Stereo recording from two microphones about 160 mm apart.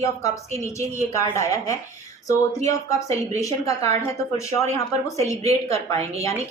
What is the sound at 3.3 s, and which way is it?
Speech, 20° left (ahead or behind).